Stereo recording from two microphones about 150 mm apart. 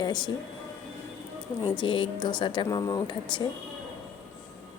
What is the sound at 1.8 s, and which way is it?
A woman's voice, 35° left (ahead or behind).